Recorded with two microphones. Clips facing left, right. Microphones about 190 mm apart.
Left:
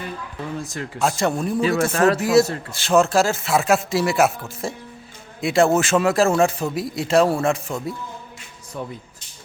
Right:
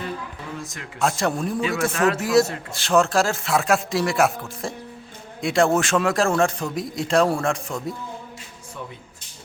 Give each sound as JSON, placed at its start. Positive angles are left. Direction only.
{"t": 0.6, "sound": "speech", "side_deg": 35}
{"t": 0.9, "sound": "a man's voice", "side_deg": 0}
{"t": 1.9, "sound": "speech", "side_deg": 35}
{"t": 2.1, "sound": "a man's voice", "side_deg": 0}